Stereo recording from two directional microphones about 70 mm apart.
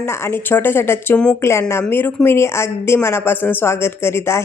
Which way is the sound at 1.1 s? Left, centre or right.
Centre.